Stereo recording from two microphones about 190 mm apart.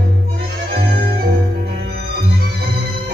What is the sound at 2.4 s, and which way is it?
Music, 60° right (ahead or behind).